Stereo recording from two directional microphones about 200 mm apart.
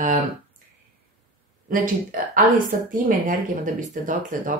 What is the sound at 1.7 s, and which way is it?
Speech, 45° right (ahead or behind).